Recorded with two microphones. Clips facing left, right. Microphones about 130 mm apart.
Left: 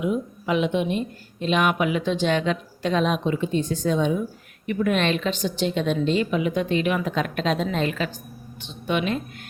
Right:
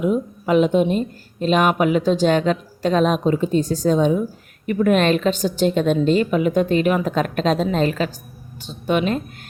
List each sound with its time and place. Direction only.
0.0 s a woman's voice: 40° right (ahead or behind)